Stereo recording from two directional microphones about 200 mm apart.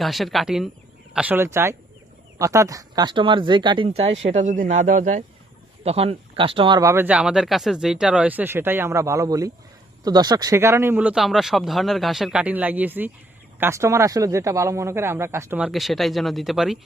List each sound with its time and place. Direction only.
0.0 s speech: centre (ahead or behind)